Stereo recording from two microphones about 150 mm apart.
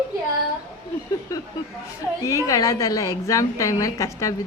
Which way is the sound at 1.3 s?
25° left (ahead or behind).